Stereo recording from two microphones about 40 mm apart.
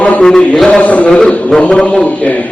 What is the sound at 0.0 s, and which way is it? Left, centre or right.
Mantra, left.